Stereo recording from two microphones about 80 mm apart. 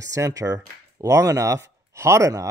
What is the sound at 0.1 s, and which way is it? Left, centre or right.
Speech, right.